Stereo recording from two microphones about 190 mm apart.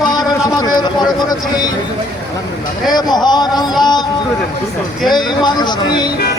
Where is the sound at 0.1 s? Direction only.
20° left (ahead or behind).